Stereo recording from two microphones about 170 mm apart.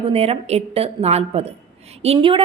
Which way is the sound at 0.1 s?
35° right (ahead or behind).